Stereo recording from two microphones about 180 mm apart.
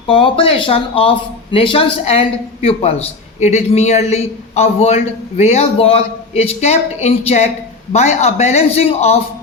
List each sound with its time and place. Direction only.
0.1 s speech: 30° left (ahead or behind)